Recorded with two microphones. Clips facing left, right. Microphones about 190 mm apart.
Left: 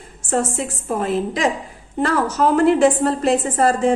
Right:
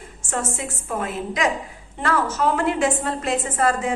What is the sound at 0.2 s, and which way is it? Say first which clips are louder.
A woman's voice: left 6 dB; 35° left (ahead or behind).